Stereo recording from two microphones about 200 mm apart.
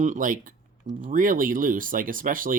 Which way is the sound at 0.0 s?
40° right (ahead or behind).